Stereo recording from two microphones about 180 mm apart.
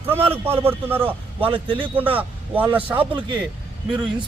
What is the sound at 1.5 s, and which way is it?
Speech, 30° right (ahead or behind).